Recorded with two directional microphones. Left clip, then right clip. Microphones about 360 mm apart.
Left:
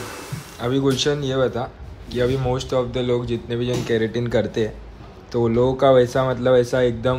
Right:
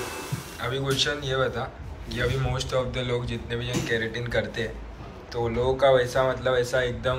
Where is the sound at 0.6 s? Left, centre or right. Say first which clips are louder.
Left 5 dB; centre.